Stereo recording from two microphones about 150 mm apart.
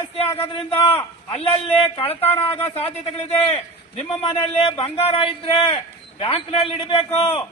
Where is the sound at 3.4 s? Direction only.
40° left (ahead or behind).